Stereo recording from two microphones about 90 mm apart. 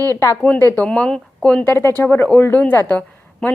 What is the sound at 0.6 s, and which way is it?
Speech, 20° left (ahead or behind).